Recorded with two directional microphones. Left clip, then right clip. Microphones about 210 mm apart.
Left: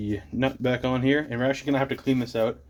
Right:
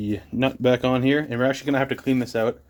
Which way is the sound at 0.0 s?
45° right (ahead or behind).